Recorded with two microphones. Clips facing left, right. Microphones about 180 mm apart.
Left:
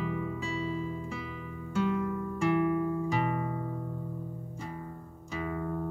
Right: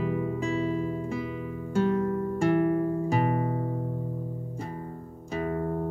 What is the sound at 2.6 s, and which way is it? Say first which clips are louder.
Music: right 3 dB; 45° right (ahead or behind).